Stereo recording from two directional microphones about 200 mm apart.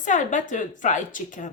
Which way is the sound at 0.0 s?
40° left (ahead or behind).